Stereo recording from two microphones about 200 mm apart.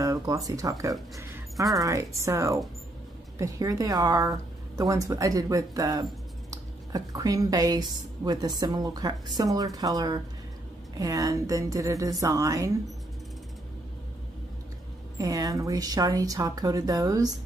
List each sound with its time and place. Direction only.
0.0 s a woman's voice: 15° right (ahead or behind)
15.1 s a woman's voice: 15° right (ahead or behind)